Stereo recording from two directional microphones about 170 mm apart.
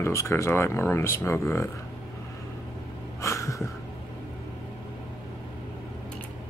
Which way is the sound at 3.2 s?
20° left (ahead or behind).